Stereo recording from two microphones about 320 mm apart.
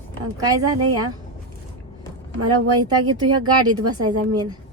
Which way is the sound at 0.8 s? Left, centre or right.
Right.